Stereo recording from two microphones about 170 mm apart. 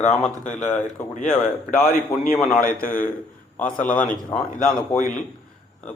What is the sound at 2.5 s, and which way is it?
Speech, 55° left (ahead or behind).